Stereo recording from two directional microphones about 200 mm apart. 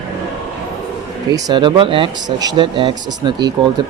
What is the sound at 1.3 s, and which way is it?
Speech, 20° right (ahead or behind).